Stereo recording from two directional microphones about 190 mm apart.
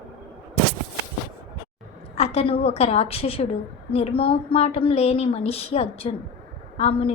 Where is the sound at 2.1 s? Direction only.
30° left (ahead or behind).